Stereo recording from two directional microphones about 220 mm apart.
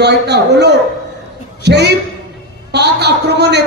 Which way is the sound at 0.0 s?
50° right (ahead or behind).